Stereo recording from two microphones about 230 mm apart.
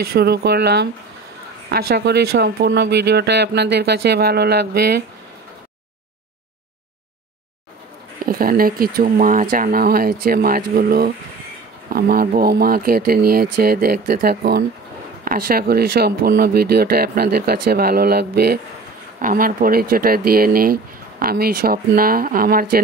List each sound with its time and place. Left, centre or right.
0.0 s speech: right
8.3 s speech: right